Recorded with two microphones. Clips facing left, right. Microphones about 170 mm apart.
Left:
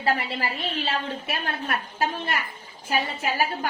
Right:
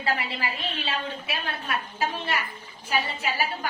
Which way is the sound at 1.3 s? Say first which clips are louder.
Left 3 dB; 50° left (ahead or behind).